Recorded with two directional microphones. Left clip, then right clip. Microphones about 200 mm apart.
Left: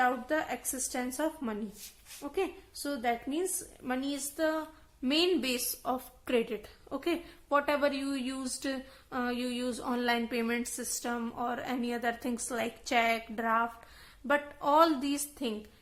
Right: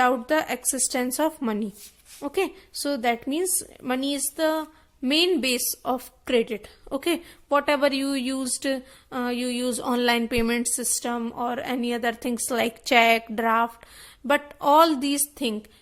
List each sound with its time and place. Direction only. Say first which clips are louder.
0.0 s a woman's voice: right 8 dB; 40° right (ahead or behind)